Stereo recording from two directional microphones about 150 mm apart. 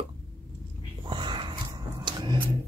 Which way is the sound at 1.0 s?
30° right (ahead or behind).